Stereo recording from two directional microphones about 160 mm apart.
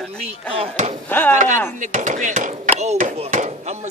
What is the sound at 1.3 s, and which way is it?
A man's voice, 50° right (ahead or behind).